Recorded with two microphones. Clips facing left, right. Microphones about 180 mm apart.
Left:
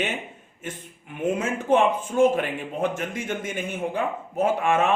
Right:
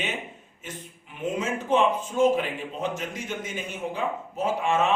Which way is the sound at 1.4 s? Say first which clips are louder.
Left 2 dB; 55° left (ahead or behind).